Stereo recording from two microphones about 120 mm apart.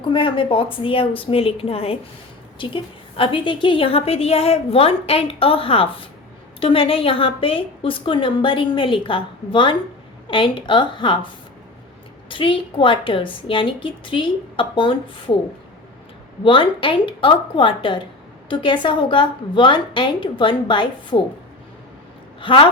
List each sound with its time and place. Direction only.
0.1 s a woman's voice: 45° left (ahead or behind)
12.3 s a woman's voice: 45° left (ahead or behind)
16.4 s a woman's voice: 45° left (ahead or behind)
22.4 s a woman's voice: 45° left (ahead or behind)